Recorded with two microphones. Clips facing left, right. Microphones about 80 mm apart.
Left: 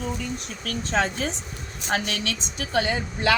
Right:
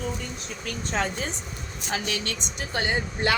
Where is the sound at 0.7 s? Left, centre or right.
Left.